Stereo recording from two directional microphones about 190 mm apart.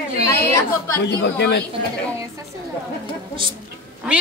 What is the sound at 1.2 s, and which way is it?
Speech, 60° left (ahead or behind).